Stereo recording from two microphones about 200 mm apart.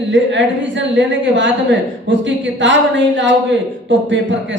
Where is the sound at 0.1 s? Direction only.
65° right (ahead or behind).